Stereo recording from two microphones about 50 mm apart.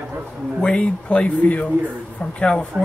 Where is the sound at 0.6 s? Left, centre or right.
Left.